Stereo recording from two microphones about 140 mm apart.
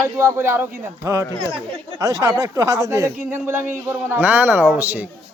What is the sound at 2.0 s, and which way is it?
A man's voice, 25° right (ahead or behind).